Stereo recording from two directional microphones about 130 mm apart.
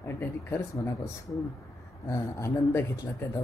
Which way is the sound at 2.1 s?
20° left (ahead or behind).